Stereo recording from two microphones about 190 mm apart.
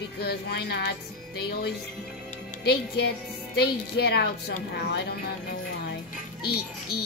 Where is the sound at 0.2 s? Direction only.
55° left (ahead or behind).